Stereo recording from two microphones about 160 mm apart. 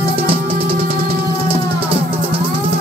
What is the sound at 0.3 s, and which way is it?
Music, 35° right (ahead or behind).